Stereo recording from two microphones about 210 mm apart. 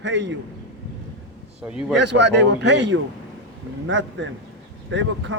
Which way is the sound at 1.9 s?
55° right (ahead or behind).